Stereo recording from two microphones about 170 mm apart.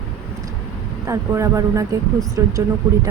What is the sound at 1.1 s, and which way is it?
Speech, 15° right (ahead or behind).